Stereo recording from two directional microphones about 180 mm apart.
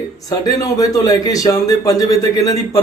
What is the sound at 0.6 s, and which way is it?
Speech, 20° left (ahead or behind).